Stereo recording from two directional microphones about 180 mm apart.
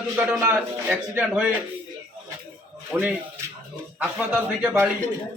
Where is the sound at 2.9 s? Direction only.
5° right (ahead or behind).